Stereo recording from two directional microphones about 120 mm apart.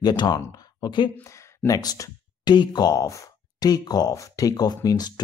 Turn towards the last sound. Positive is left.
turn(degrees=35)  # may be behind; listen again after turning